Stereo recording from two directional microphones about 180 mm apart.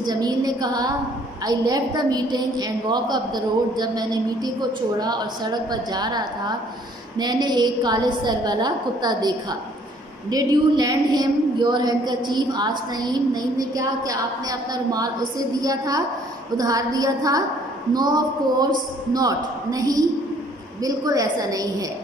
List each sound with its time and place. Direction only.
0.0 s a woman's voice: 20° right (ahead or behind)